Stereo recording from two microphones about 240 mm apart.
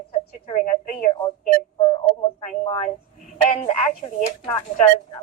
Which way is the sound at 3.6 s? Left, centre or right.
Left.